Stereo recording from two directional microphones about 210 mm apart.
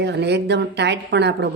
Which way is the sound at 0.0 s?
55° right (ahead or behind).